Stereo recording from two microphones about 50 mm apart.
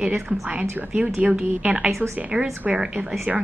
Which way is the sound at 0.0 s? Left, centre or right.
Right.